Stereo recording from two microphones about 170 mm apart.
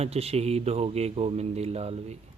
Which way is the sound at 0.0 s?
35° right (ahead or behind).